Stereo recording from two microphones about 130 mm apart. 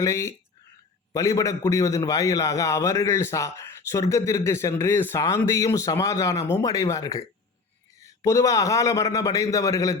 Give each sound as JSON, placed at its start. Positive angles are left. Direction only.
{"t": 0.0, "sound": "a man's voice", "side_deg": 20}